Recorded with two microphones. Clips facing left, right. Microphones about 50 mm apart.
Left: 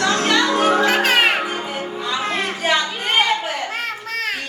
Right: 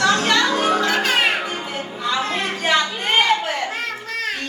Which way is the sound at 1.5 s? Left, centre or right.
Centre.